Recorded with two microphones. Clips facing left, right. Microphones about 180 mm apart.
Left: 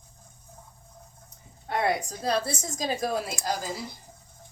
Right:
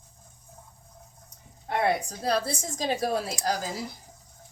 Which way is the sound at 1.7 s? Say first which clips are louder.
Right 1 dB; 30° right (ahead or behind).